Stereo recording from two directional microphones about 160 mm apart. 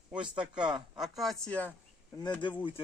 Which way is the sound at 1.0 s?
Centre (ahead or behind).